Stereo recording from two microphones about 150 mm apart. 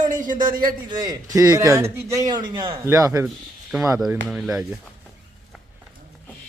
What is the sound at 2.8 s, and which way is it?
Speech, 20° right (ahead or behind).